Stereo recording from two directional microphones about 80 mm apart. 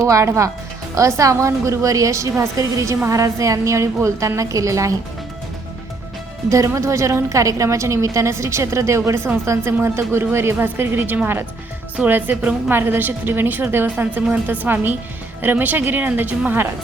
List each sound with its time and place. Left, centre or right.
0.1 s a woman's voice: right
6.5 s a woman's voice: right; by 12.7 s centre
12.7 s speech: right